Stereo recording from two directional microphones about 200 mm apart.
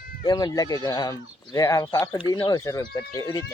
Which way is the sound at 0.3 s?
20° left (ahead or behind).